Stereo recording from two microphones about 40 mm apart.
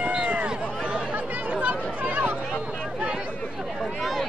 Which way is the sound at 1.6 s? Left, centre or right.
Right.